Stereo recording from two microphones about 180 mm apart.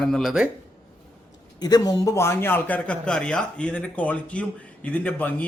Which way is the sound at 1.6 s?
20° left (ahead or behind).